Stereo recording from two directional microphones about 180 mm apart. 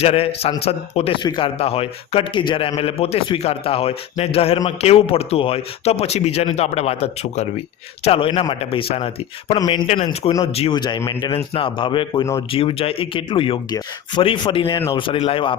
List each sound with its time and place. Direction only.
0.0 s speech: 35° left (ahead or behind)